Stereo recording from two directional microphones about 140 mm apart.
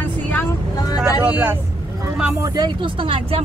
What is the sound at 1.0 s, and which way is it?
Speech, 10° right (ahead or behind).